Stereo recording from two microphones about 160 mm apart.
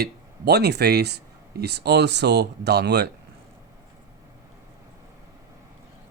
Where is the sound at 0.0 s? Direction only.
90° right.